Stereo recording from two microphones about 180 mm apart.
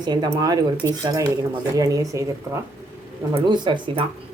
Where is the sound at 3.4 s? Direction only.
25° right (ahead or behind).